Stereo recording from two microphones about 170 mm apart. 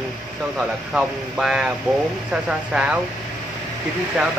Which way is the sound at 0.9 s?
5° right (ahead or behind).